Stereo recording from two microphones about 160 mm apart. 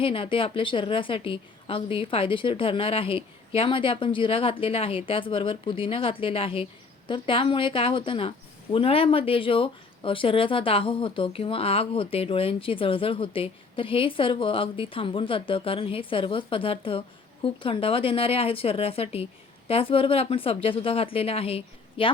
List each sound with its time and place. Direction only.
0.0 s speech: 35° left (ahead or behind)